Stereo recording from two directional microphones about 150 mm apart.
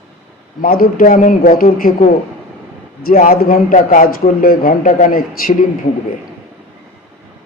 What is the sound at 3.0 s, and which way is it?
A man's voice, 70° left (ahead or behind).